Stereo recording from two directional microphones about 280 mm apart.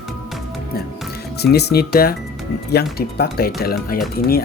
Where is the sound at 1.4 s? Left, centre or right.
Left.